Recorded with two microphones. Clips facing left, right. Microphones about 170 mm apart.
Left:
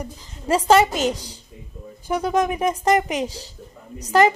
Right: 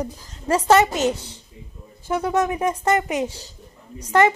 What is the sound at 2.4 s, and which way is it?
Speech, 10° left (ahead or behind).